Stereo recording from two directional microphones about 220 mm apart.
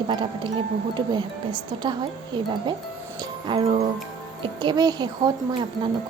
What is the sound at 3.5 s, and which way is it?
A woman's voice, 25° right (ahead or behind).